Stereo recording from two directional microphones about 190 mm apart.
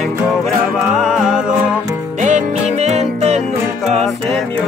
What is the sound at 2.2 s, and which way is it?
Music, 40° right (ahead or behind).